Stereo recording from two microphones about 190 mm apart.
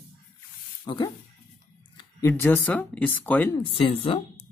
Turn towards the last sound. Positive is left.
turn(degrees=30)  # may be behind; listen again after turning